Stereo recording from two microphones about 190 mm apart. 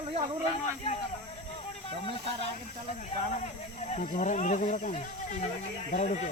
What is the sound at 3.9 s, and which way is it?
Speech, 40° left (ahead or behind).